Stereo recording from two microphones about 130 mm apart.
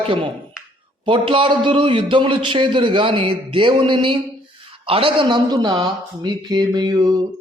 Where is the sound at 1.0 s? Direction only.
40° right (ahead or behind).